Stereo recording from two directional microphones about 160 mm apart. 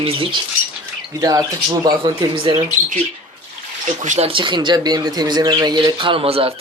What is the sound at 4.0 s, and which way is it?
Speech, 45° right (ahead or behind).